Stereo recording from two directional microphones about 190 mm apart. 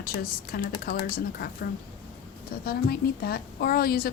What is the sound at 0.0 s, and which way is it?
A woman's voice, 50° left (ahead or behind).